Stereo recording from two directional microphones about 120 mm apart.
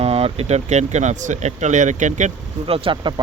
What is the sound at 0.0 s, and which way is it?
Speech, 55° right (ahead or behind).